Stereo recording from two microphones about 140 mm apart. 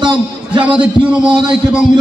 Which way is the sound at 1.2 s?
35° right (ahead or behind).